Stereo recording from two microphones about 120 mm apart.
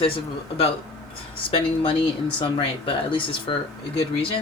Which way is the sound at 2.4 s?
45° left (ahead or behind).